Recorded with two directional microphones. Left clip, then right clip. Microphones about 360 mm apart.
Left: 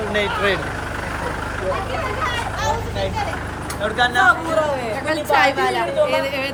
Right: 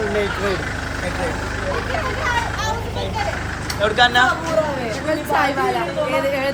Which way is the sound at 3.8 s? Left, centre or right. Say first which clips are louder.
Right 3 dB; centre.